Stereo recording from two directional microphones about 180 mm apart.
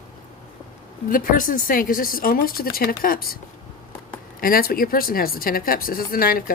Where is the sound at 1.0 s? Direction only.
50° left (ahead or behind).